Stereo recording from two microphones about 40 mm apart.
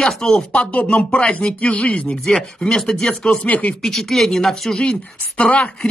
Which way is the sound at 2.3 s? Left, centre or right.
Left.